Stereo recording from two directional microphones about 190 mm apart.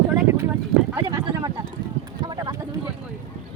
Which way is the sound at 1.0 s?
20° right (ahead or behind).